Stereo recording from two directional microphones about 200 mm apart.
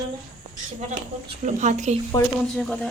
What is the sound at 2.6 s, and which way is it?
Speech, centre (ahead or behind).